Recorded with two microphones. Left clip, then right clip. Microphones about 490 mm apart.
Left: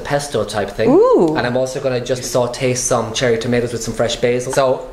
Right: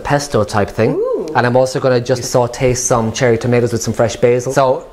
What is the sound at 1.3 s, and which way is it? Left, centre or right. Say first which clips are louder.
Speech: right 5 dB; right.